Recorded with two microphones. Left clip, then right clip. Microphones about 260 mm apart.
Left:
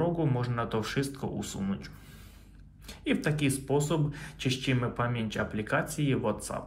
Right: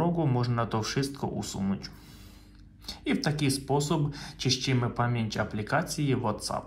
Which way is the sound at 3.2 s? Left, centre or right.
Centre.